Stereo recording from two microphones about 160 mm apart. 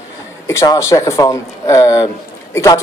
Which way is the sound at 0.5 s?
20° left (ahead or behind).